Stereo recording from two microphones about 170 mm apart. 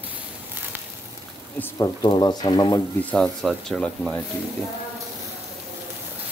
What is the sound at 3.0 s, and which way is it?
Speech, 5° left (ahead or behind).